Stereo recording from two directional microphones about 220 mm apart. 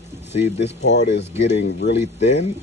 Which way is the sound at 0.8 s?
50° left (ahead or behind).